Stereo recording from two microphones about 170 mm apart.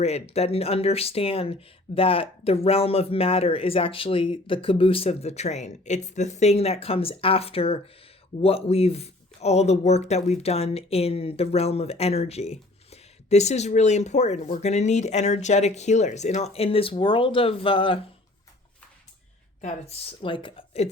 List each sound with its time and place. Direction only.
0.0 s speech: 40° left (ahead or behind)
19.6 s speech: 35° left (ahead or behind)